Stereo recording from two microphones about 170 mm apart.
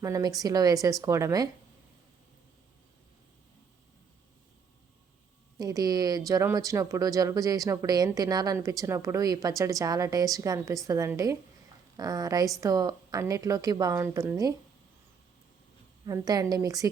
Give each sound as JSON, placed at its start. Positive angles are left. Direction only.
{"t": 0.0, "sound": "speech", "side_deg": -20}
{"t": 5.5, "sound": "speech", "side_deg": -20}
{"t": 16.0, "sound": "speech", "side_deg": -20}